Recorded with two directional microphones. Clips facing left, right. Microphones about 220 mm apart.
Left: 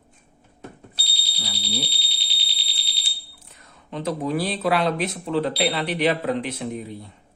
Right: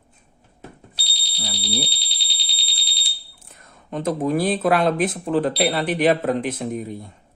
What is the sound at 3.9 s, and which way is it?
Speech, 50° right (ahead or behind).